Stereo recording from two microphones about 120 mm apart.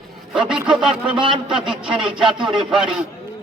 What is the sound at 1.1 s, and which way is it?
Speech, 40° right (ahead or behind).